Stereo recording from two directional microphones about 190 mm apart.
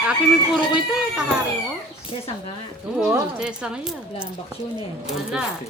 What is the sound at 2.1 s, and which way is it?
Speech, 30° left (ahead or behind).